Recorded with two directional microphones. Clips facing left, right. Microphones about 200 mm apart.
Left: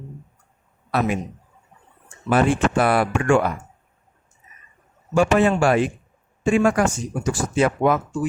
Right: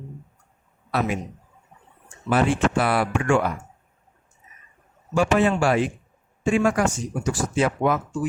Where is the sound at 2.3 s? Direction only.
50° left (ahead or behind).